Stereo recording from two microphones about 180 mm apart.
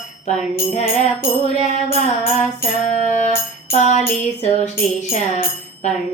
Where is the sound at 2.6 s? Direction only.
45° left (ahead or behind).